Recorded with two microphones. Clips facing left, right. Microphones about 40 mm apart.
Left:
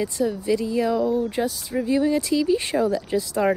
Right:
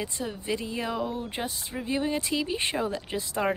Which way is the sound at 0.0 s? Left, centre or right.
Right.